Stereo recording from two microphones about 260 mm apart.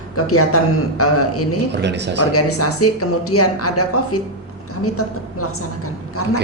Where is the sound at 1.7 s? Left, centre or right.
Right.